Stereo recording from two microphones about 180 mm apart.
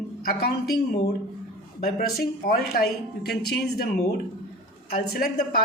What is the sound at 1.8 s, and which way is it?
Speech, 55° left (ahead or behind).